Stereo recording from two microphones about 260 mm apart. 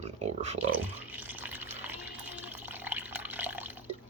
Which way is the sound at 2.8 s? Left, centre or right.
Centre.